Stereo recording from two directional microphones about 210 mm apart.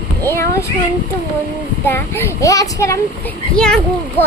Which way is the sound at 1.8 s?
10° left (ahead or behind).